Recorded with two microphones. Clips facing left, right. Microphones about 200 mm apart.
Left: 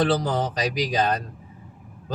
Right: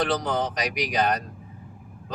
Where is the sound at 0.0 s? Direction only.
30° left (ahead or behind).